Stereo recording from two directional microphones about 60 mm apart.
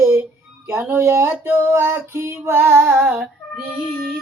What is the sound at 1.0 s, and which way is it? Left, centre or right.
Music, right.